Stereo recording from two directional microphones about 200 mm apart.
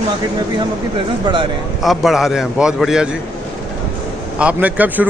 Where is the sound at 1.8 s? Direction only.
Centre (ahead or behind).